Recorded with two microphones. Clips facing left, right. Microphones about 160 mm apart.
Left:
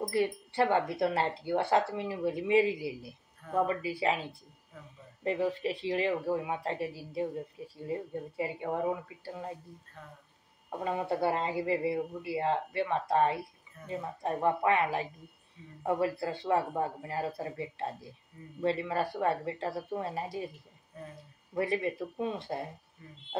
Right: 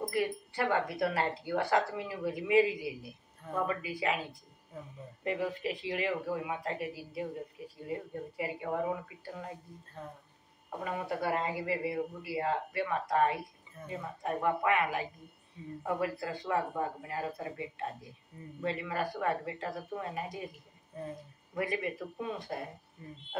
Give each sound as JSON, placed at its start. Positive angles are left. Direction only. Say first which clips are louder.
{"t": 0.1, "sound": "speech", "louder": "left 3 dB", "side_deg": 25}
{"t": 10.8, "sound": "speech", "louder": "left 4 dB", "side_deg": 25}
{"t": 20.9, "sound": "speech", "louder": "right 4 dB", "side_deg": -30}
{"t": 21.5, "sound": "speech", "louder": "left 3 dB", "side_deg": 30}